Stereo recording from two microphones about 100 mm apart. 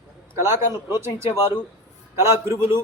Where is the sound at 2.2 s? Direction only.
25° right (ahead or behind).